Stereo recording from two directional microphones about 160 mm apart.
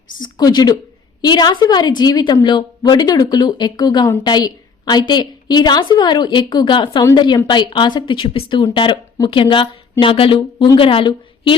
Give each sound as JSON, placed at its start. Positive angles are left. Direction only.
{"t": 0.2, "sound": "a woman's voice", "side_deg": 25}